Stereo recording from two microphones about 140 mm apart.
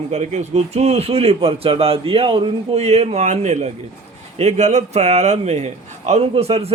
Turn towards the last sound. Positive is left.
turn(degrees=-45)  # may be behind; listen again after turning